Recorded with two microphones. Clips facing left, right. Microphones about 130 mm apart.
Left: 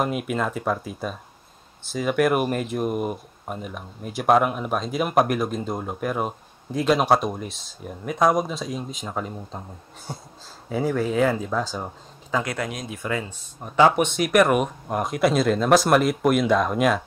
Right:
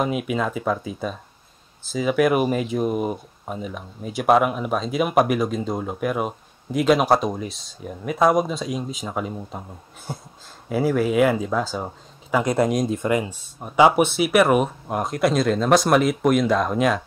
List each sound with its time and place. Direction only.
0.0 s speech: centre (ahead or behind)
12.5 s speech: 45° right (ahead or behind)
13.0 s speech: 15° right (ahead or behind); by 17.0 s centre (ahead or behind)